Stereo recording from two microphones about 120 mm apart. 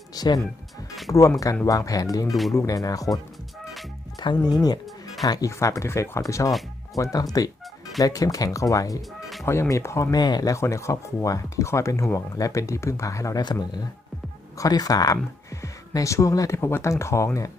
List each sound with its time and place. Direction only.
0.1 s speech: 30° left (ahead or behind)
2.3 s speech: centre (ahead or behind)
2.6 s speech: 30° left (ahead or behind)
4.4 s speech: 35° left (ahead or behind)